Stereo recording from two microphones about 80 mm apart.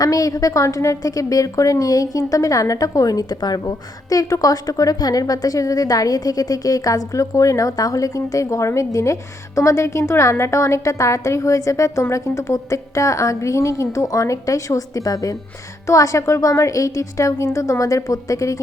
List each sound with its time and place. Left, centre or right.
0.0 s a woman's voice: left
4.1 s a woman's voice: left